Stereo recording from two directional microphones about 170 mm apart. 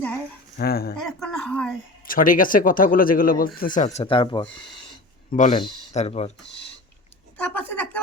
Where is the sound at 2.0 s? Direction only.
55° left (ahead or behind); by 4.4 s 30° left (ahead or behind).